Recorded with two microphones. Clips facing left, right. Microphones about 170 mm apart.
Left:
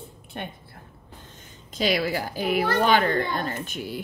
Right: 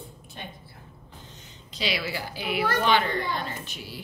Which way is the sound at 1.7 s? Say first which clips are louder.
Left 6 dB; 45° left (ahead or behind).